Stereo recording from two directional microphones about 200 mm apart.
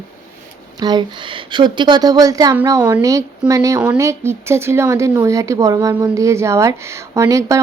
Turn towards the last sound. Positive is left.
turn(degrees=-15)  # may be behind; listen again after turning